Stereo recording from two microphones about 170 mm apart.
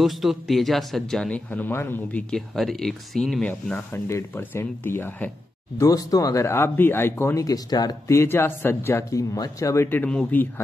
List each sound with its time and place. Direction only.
0.0 s speech: centre (ahead or behind)